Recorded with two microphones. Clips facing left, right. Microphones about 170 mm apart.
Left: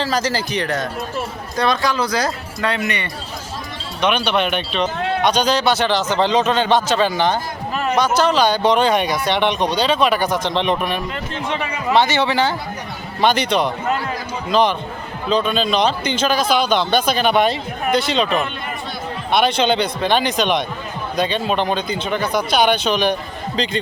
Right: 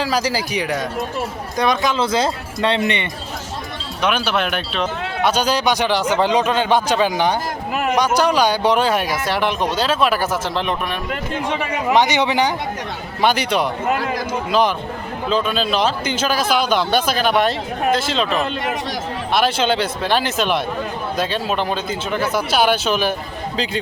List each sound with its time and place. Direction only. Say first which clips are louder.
0.0 s speech: even; 10° right (ahead or behind); by 3.1 s 25° right (ahead or behind)
4.0 s speech: left 2 dB; 5° right (ahead or behind)
11.5 s speech: even; 15° right (ahead or behind)
15.3 s speech: left 2 dB; 5° right (ahead or behind)